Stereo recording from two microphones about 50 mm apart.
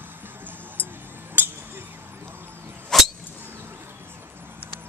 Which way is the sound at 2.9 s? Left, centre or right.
Centre.